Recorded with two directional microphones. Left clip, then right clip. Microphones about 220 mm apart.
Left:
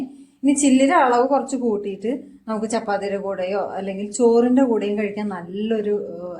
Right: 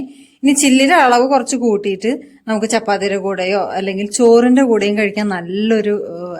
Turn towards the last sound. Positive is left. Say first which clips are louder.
# right 4 dB
turn(degrees=-40)  # may be behind; listen again after turning